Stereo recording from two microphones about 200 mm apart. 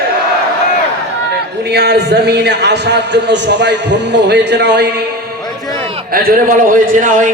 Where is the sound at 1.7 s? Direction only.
55° right (ahead or behind).